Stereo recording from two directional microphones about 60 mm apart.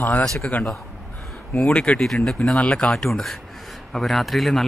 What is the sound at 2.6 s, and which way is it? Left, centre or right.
Speech, left.